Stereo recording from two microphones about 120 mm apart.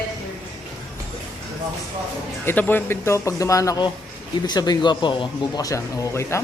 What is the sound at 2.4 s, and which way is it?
A man's voice, 15° left (ahead or behind).